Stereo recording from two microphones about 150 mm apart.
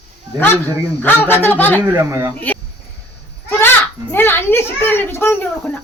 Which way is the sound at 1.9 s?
15° right (ahead or behind).